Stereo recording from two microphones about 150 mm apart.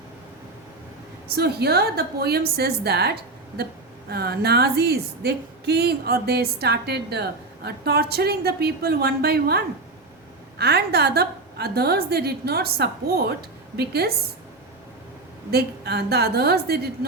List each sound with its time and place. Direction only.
1.4 s speech: 90° right
15.4 s speech: 90° right